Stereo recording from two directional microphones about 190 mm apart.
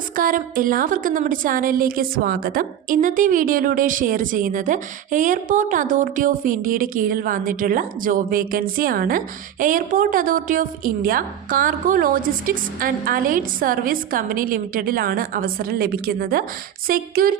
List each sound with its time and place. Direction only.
0.2 s a woman's voice: 45° right (ahead or behind)